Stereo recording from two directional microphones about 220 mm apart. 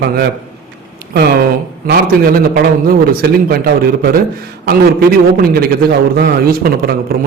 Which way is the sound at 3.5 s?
45° right (ahead or behind).